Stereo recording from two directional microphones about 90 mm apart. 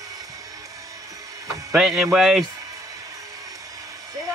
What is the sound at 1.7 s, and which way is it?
Speech, 5° right (ahead or behind).